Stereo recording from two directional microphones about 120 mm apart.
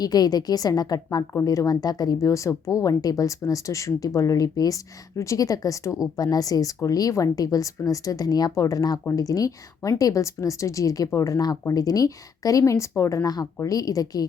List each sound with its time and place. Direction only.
0.0 s a woman's voice: 35° left (ahead or behind)